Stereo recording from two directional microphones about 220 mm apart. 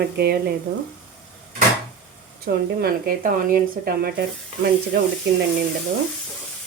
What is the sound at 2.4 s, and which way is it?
Speech, 45° right (ahead or behind).